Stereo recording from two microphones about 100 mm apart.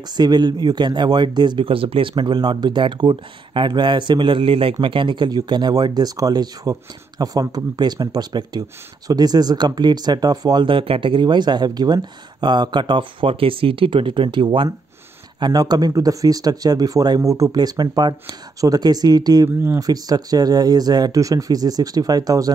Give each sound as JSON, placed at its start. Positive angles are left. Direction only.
{"t": 0.2, "sound": "speech", "side_deg": -45}
{"t": 10.7, "sound": "speech", "side_deg": -60}
{"t": 15.4, "sound": "speech", "side_deg": -40}